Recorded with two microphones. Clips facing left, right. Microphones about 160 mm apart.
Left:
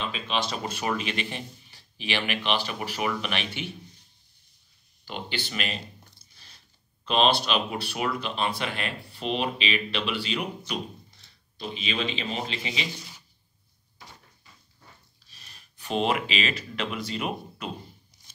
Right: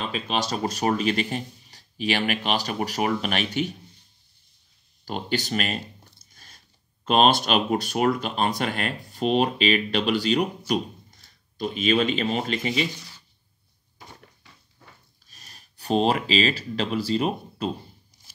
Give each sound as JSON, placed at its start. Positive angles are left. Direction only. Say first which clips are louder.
{"t": 0.0, "sound": "speech", "louder": "right 2 dB", "side_deg": -40}
{"t": 5.0, "sound": "a sound", "louder": "right 7 dB", "side_deg": -45}
{"t": 7.1, "sound": "speech", "louder": "right 4 dB", "side_deg": -45}
{"t": 15.2, "sound": "speech", "louder": "right 3 dB", "side_deg": -45}